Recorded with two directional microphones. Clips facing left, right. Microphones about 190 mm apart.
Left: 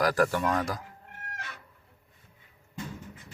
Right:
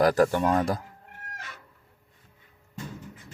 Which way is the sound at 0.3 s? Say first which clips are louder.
Right 4 dB; 25° right (ahead or behind).